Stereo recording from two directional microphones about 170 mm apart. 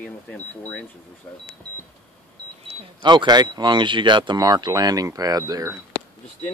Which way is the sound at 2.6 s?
25° right (ahead or behind).